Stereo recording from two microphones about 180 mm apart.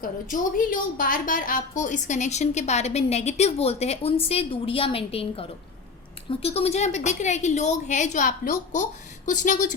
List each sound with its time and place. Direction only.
0.0 s a woman's voice: 50° left (ahead or behind)